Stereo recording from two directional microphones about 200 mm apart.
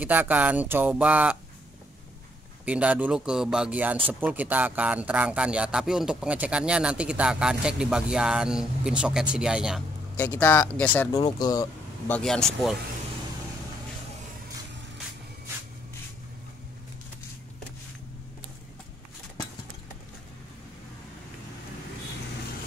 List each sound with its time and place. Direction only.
0.0 s speech: 10° right (ahead or behind)
2.6 s speech: 5° right (ahead or behind)
10.1 s speech: 10° left (ahead or behind)
12.1 s speech: 5° left (ahead or behind)